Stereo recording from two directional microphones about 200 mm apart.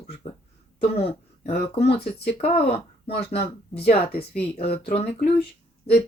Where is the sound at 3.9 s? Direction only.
30° left (ahead or behind).